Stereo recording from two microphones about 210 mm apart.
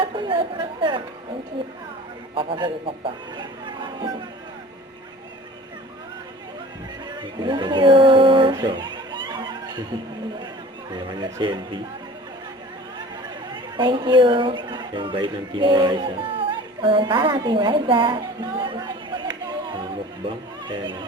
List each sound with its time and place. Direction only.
0.0 s speech: 25° right (ahead or behind)
2.3 s speech: 25° right (ahead or behind)
7.4 s a sound: 20° right (ahead or behind)
10.9 s speech: 20° right (ahead or behind)
13.7 s a woman's voice: 25° right (ahead or behind)